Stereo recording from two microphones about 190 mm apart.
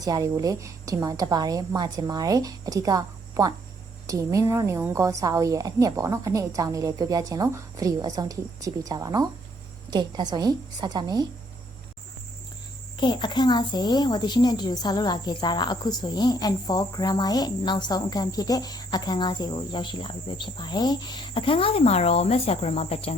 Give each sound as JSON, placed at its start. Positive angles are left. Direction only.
{"t": 0.0, "sound": "a woman's voice", "side_deg": -20}
{"t": 13.0, "sound": "a woman's voice", "side_deg": 25}